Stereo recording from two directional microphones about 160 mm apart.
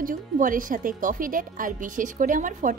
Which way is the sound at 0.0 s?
55° right (ahead or behind).